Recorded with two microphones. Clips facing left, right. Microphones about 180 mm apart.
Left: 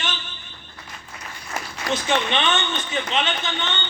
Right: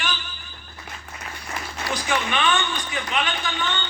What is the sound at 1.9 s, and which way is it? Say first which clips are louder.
A man's voice: left 3 dB; 25° left (ahead or behind).